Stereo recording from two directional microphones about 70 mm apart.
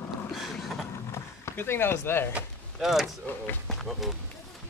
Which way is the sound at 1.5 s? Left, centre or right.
Left.